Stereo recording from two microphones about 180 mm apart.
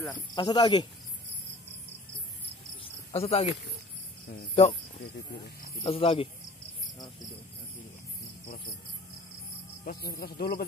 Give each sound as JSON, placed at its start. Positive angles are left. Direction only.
{"t": 0.1, "sound": "speech", "side_deg": 25}
{"t": 2.8, "sound": "cricket", "side_deg": 35}
{"t": 4.4, "sound": "speech", "side_deg": 35}
{"t": 5.1, "sound": "speech", "side_deg": 70}
{"t": 5.9, "sound": "speech", "side_deg": 30}
{"t": 9.8, "sound": "speech", "side_deg": 55}